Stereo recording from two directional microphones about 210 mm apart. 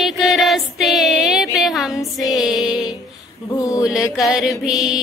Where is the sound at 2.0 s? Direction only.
15° left (ahead or behind).